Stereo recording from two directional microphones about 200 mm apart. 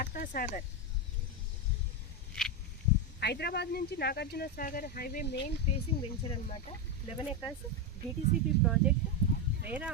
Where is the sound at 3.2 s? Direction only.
55° left (ahead or behind).